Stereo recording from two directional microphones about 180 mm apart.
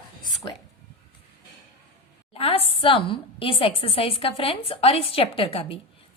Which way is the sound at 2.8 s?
30° left (ahead or behind).